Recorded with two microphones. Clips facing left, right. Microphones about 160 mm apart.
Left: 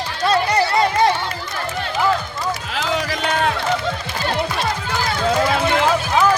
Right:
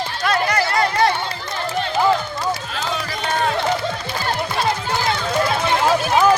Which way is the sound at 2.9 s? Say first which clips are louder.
Left 6 dB; 90° left.